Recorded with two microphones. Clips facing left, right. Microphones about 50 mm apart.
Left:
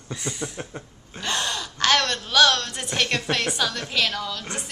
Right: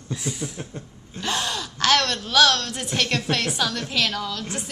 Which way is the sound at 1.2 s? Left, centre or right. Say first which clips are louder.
Right 1 dB; centre.